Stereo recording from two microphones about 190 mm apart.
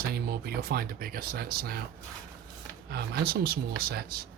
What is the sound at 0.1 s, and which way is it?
Speech, 55° right (ahead or behind).